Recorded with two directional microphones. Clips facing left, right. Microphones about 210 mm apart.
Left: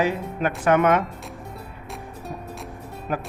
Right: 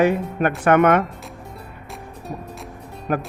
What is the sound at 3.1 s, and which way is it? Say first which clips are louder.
Speech: right 5 dB; 60° right (ahead or behind).